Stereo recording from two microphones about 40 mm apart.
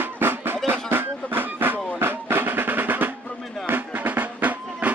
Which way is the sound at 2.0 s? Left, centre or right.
Right.